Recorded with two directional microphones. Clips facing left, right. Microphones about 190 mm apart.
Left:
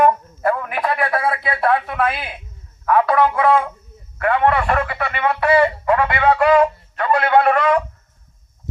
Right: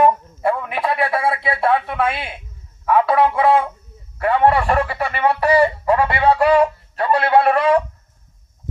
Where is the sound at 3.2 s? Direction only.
30° right (ahead or behind).